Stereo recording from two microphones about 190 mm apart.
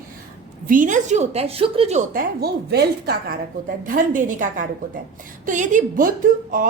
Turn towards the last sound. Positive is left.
turn(degrees=-45)  # may be behind; listen again after turning